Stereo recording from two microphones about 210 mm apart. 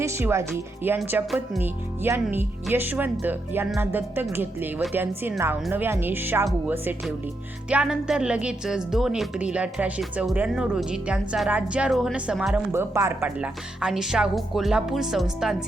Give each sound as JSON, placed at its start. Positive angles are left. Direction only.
{"t": 0.0, "sound": "a woman's voice", "side_deg": -10}